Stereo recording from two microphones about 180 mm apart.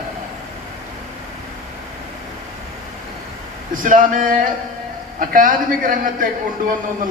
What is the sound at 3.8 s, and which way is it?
Speech, 50° right (ahead or behind).